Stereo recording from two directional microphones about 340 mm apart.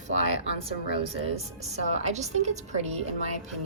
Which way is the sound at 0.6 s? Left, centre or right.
Centre.